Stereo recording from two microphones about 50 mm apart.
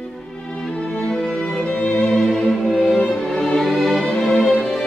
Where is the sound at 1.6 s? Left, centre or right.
Left.